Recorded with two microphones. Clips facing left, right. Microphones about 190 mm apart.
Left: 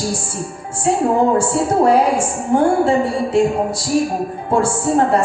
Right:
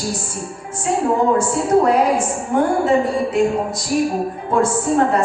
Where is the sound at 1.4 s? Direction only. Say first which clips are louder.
Even; 30° left (ahead or behind).